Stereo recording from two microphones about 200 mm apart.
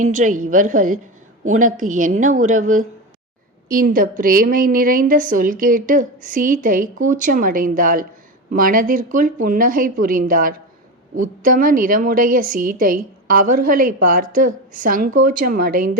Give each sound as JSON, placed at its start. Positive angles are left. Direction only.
{"t": 0.0, "sound": "a woman's voice", "side_deg": -35}